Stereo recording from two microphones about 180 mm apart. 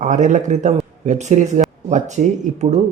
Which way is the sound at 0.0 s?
45° right (ahead or behind).